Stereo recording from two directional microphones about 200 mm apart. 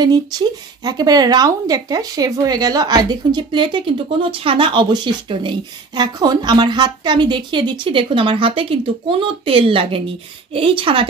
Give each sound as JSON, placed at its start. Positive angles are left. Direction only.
{"t": 0.0, "sound": "speech", "side_deg": -20}